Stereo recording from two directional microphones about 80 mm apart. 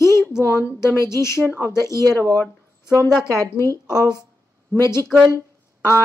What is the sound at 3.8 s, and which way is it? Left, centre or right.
Speech, left.